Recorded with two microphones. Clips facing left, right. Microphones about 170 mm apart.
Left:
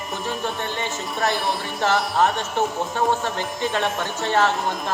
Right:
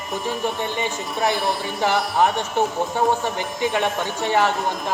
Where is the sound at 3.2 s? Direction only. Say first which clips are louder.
Right 2 dB; 15° right (ahead or behind).